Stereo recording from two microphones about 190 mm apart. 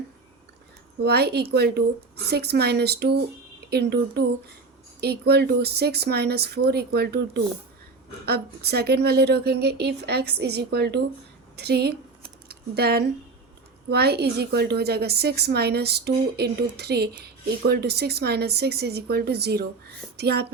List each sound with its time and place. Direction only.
1.0 s a woman's voice: 60° right (ahead or behind)